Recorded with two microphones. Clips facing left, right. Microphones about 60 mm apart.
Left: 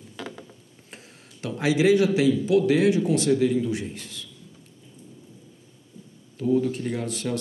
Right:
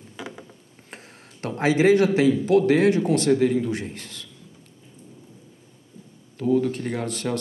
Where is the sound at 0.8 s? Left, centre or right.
Right.